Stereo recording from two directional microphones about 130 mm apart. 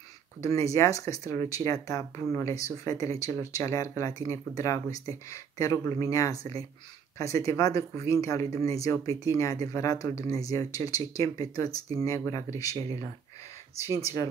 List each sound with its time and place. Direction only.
0.4 s speech: 25° left (ahead or behind)
13.7 s speech: 20° right (ahead or behind)